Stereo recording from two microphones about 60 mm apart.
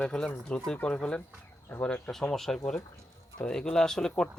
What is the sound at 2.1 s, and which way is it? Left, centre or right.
Speech, centre.